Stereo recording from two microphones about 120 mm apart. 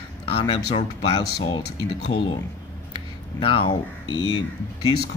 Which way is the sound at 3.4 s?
45° left (ahead or behind).